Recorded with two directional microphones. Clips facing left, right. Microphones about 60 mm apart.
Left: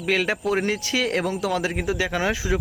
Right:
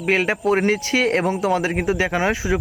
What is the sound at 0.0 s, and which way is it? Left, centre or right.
Speech, right.